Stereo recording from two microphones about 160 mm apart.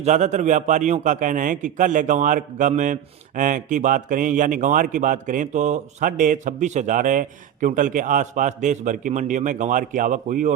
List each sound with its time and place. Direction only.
0.0 s a man's voice: 45° right (ahead or behind)